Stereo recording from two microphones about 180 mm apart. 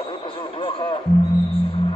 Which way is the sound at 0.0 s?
30° left (ahead or behind).